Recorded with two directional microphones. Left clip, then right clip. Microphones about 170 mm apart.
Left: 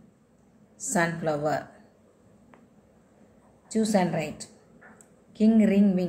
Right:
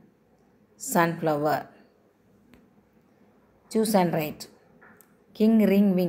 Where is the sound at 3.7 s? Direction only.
35° right (ahead or behind).